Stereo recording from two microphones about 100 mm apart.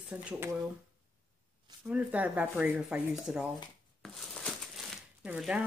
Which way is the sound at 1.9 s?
15° right (ahead or behind).